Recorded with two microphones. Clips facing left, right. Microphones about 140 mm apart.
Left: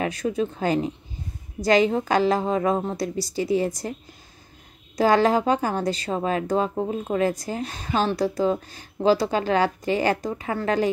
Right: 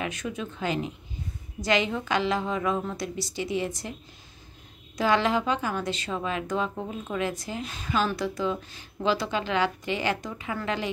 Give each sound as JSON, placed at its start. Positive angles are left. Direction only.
{"t": 0.0, "sound": "speech", "side_deg": 35}
{"t": 4.9, "sound": "speech", "side_deg": 40}